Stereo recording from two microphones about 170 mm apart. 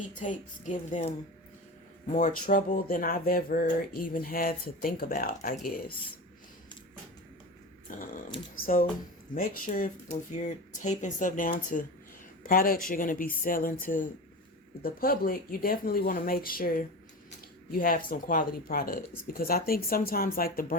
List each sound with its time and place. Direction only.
0.1 s speech: 50° left (ahead or behind)
2.1 s speech: 50° left (ahead or behind)
7.9 s speech: 50° left (ahead or behind)